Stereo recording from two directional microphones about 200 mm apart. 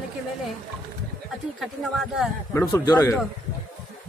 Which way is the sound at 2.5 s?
15° left (ahead or behind).